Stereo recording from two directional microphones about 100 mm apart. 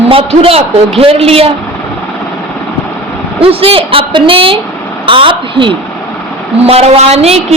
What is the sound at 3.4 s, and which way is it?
A woman's voice, 70° right (ahead or behind).